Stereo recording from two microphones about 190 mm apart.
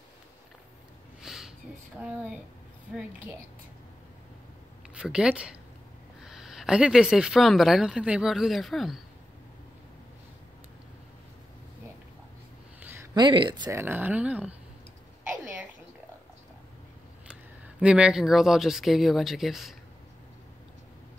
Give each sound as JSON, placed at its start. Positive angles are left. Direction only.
{"t": 1.2, "sound": "a sound", "side_deg": 0}
{"t": 2.0, "sound": "speech", "side_deg": -5}
{"t": 4.9, "sound": "speech", "side_deg": -5}
{"t": 12.8, "sound": "speech", "side_deg": -20}
{"t": 13.7, "sound": "speech", "side_deg": -10}
{"t": 17.3, "sound": "speech", "side_deg": -5}